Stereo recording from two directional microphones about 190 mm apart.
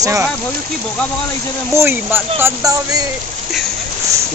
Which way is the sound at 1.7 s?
15° right (ahead or behind).